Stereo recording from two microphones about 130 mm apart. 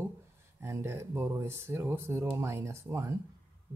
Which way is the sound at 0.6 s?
20° right (ahead or behind).